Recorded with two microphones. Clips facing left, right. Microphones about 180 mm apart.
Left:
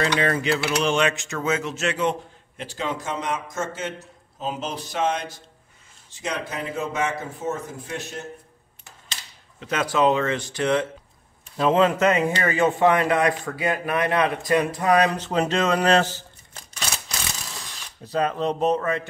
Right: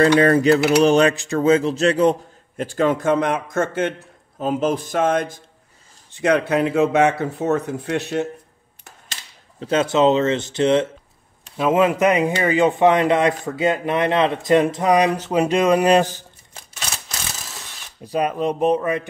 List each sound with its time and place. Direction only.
0.2 s a man's voice: 40° right (ahead or behind); by 8.3 s 70° right (ahead or behind)
9.6 s speech: 30° right (ahead or behind)
11.5 s speech: 10° right (ahead or behind)
18.0 s speech: 10° right (ahead or behind)